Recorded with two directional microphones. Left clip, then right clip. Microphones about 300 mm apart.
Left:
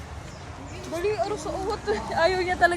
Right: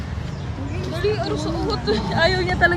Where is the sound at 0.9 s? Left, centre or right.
Centre.